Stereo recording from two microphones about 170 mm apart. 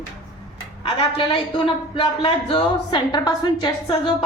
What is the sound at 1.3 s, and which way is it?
Speech, 30° left (ahead or behind).